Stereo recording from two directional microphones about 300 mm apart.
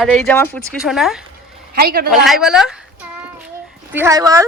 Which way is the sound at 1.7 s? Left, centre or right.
Right.